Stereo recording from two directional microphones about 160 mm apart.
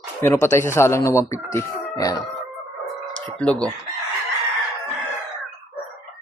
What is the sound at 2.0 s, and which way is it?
Music, 20° left (ahead or behind).